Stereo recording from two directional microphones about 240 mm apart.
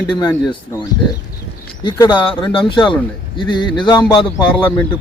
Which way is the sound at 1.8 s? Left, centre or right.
Centre.